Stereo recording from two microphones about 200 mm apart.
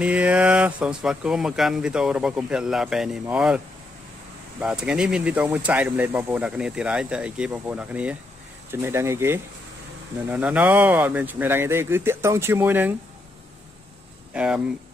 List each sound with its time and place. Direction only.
0.0 s speech: 5° right (ahead or behind)
14.3 s speech: 5° right (ahead or behind)